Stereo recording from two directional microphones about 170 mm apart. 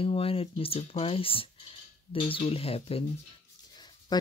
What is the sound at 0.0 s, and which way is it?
Speech, 35° left (ahead or behind).